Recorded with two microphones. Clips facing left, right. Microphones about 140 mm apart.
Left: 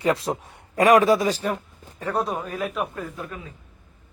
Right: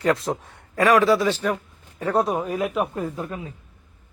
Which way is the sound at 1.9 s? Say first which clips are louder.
Right 4 dB; 15° right (ahead or behind).